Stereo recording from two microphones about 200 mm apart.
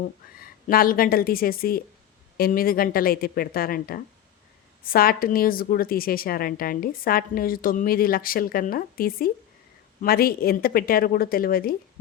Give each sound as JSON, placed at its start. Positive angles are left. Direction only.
{"t": 0.3, "sound": "a woman's voice", "side_deg": 45}